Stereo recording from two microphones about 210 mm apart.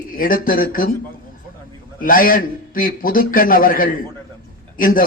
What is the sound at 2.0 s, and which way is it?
A man's voice, 40° left (ahead or behind).